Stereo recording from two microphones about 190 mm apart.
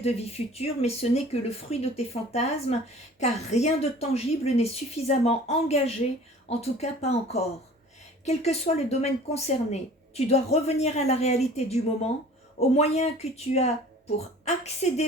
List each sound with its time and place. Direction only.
0.0 s speech: 30° left (ahead or behind)